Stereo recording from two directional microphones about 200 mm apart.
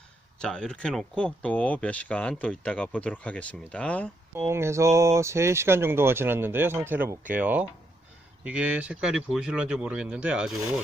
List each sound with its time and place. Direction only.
0.3 s speech: 5° left (ahead or behind)
4.4 s speech: 10° right (ahead or behind)